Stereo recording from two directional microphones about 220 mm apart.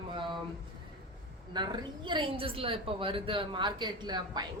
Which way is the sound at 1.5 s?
20° right (ahead or behind).